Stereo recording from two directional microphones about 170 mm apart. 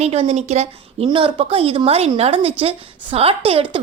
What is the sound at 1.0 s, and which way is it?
A woman's voice, 30° right (ahead or behind).